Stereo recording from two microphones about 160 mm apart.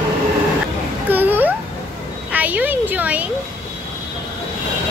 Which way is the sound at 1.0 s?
10° right (ahead or behind).